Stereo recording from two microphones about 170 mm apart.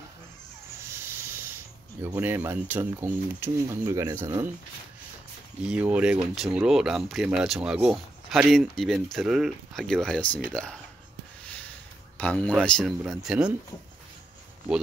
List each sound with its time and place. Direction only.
0.9 s sanding: 15° right (ahead or behind)
2.0 s speech: 15° right (ahead or behind)
5.7 s speech: 5° right (ahead or behind)
12.2 s speech: 10° left (ahead or behind)